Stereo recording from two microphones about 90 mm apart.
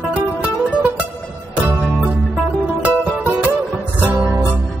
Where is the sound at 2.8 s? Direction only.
15° right (ahead or behind).